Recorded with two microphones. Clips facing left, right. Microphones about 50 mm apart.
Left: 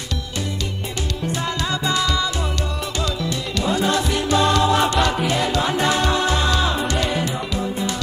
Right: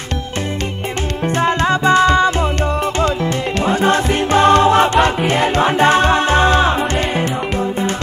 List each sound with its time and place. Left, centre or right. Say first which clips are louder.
1.2 s music: right 10 dB; right